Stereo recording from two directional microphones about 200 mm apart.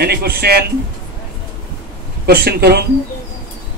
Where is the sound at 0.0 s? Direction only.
50° right (ahead or behind).